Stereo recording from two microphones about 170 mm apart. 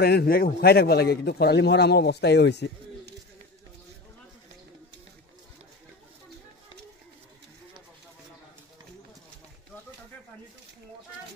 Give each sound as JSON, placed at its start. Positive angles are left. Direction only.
{"t": 0.0, "sound": "a man's voice", "side_deg": 65}